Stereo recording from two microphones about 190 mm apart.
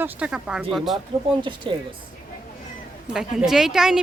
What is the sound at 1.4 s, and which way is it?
Speech, 25° right (ahead or behind).